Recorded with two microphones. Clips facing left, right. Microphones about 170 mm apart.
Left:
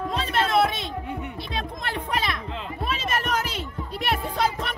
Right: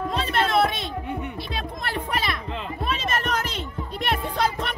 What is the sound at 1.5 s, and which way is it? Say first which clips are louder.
Music: left 1 dB; 5° right (ahead or behind).